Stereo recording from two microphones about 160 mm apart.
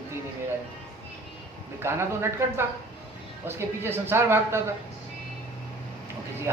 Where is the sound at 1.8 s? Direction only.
15° right (ahead or behind).